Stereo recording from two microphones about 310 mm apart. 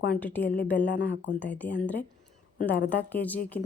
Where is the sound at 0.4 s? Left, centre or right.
Left.